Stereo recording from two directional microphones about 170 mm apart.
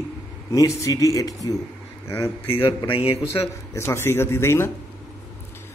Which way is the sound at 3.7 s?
15° left (ahead or behind).